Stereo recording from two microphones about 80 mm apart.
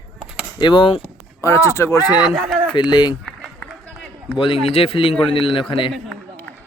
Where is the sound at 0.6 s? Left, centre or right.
Left.